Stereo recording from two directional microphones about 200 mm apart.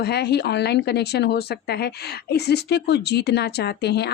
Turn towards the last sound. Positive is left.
turn(degrees=55)  # may be behind; listen again after turning